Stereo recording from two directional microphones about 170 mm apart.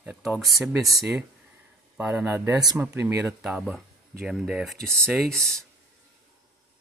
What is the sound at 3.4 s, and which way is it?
Speech, 5° right (ahead or behind).